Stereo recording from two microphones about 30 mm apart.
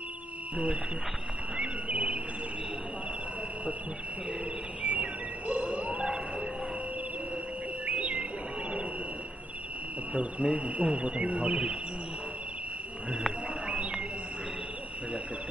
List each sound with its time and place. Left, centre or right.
1.6 s cricket: right
4.8 s bird: right
5.6 s wild animals: right
7.8 s bird: right
10.1 s speech: right